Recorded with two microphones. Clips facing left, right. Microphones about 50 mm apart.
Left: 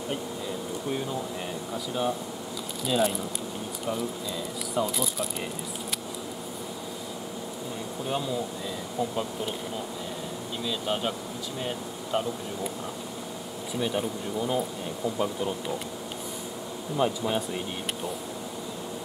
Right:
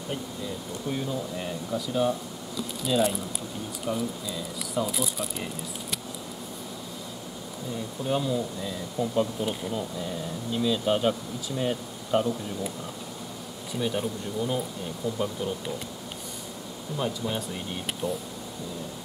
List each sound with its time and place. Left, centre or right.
0.8 s speech: centre
8.1 s speech: centre
13.7 s speech: centre
16.9 s speech: centre